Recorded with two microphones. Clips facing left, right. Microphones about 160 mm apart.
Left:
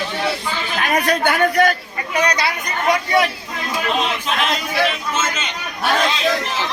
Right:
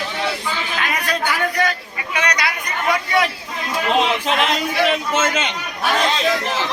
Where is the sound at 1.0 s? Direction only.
50° left (ahead or behind).